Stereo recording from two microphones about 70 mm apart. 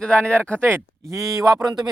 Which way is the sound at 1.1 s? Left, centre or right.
Right.